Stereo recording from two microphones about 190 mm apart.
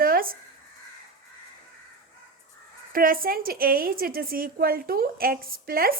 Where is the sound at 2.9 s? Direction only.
50° right (ahead or behind).